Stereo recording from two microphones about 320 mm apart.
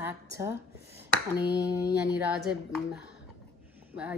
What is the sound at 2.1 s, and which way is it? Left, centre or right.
Speech, centre.